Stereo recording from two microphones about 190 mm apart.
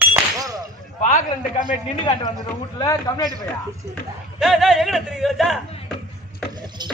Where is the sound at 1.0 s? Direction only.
40° left (ahead or behind).